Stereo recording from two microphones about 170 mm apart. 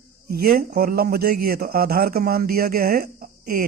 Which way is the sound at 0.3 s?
60° right (ahead or behind).